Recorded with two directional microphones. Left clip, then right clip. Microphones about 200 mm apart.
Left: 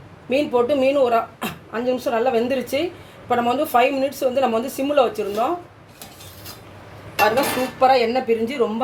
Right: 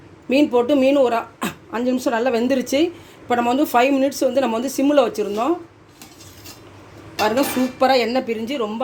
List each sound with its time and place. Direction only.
0.3 s a woman's voice: 45° right (ahead or behind)
7.8 s a woman's voice: 55° right (ahead or behind); by 8.7 s 35° right (ahead or behind)